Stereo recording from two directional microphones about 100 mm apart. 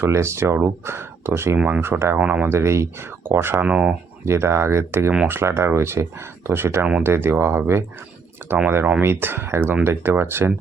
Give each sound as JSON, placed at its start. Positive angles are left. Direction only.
{"t": 0.0, "sound": "speech", "side_deg": -30}
{"t": 1.5, "sound": "speech", "side_deg": -15}
{"t": 2.1, "sound": "speech", "side_deg": -15}
{"t": 2.5, "sound": "speech", "side_deg": -25}
{"t": 3.7, "sound": "speech", "side_deg": -10}
{"t": 4.3, "sound": "speech", "side_deg": -25}
{"t": 8.7, "sound": "speech", "side_deg": -20}